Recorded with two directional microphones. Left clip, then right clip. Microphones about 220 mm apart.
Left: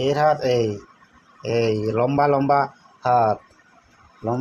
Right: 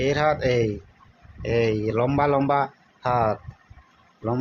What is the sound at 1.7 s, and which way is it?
A man's voice, 10° right (ahead or behind).